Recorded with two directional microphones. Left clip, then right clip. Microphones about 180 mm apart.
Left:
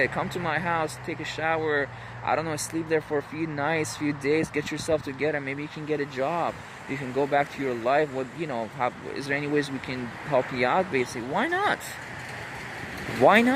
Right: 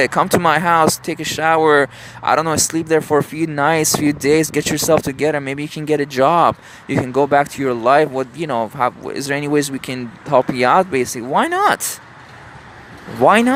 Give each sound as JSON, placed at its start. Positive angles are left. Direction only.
{"t": 0.0, "sound": "speech", "side_deg": -30}
{"t": 13.1, "sound": "speech", "side_deg": -20}